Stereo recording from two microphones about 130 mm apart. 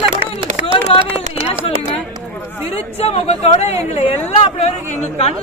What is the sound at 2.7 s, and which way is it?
Speech, 50° left (ahead or behind).